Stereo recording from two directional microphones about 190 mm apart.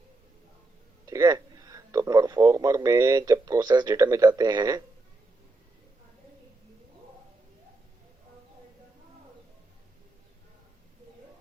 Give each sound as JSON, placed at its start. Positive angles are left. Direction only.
{"t": 1.0, "sound": "speech", "side_deg": -15}